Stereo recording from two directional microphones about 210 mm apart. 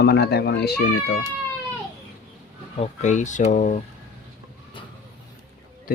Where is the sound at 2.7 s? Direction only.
30° left (ahead or behind).